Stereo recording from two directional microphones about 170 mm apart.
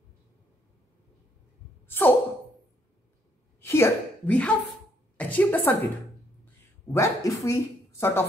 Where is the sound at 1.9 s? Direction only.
10° left (ahead or behind).